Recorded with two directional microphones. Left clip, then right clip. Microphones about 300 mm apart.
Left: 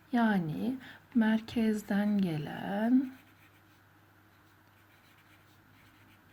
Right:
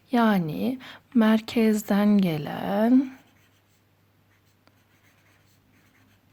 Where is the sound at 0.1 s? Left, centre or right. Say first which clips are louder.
Right 8 dB; right.